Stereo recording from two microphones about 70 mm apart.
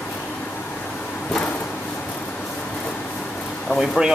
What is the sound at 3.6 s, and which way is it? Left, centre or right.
Speech, centre.